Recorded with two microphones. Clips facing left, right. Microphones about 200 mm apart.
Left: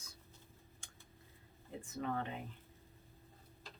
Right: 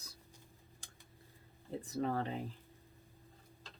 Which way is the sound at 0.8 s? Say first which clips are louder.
Right 1 dB; 35° right (ahead or behind).